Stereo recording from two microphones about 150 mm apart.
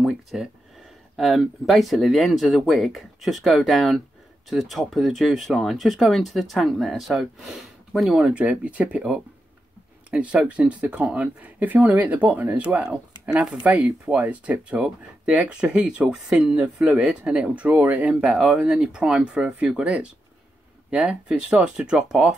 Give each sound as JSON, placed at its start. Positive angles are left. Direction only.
{"t": 0.0, "sound": "speech", "side_deg": 0}